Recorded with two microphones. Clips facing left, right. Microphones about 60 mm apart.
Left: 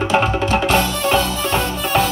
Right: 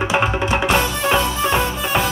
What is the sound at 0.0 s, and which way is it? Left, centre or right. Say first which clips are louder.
Music: left 2 dB; centre.